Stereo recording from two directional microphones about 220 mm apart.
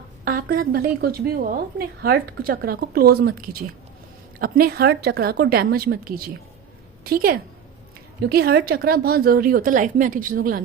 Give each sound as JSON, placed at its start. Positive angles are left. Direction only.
{"t": 0.3, "sound": "a woman's voice", "side_deg": -40}